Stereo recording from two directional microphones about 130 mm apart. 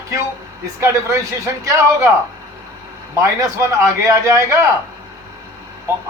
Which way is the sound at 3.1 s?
20° right (ahead or behind).